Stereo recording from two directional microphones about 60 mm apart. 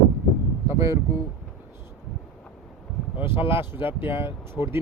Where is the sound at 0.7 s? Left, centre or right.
Right.